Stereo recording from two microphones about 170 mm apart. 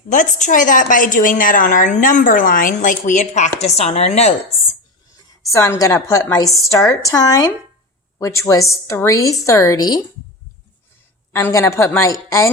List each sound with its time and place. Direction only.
0.1 s a woman's voice: 50° left (ahead or behind)
5.1 s a woman's voice: 15° left (ahead or behind)
11.3 s a woman's voice: 15° left (ahead or behind)